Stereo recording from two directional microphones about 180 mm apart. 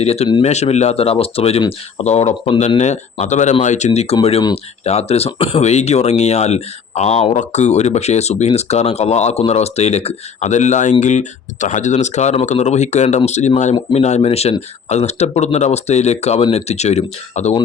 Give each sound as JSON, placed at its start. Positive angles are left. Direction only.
{"t": 0.0, "sound": "speech", "side_deg": 35}